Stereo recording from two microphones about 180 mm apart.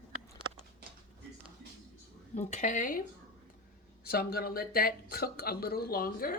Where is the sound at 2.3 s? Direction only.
40° left (ahead or behind).